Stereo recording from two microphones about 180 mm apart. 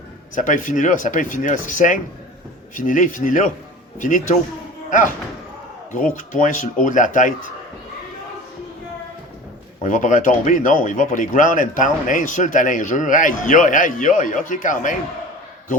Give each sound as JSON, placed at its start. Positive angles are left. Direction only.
{"t": 0.3, "sound": "speech", "side_deg": 45}
{"t": 6.1, "sound": "speech", "side_deg": 45}
{"t": 9.8, "sound": "speech", "side_deg": 45}